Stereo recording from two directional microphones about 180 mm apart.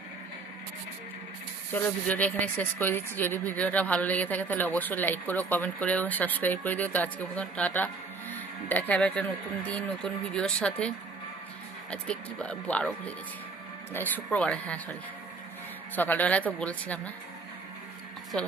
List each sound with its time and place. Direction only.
1.7 s speech: 10° left (ahead or behind)
13.9 s speech: 10° left (ahead or behind)
16.0 s speech: 10° left (ahead or behind)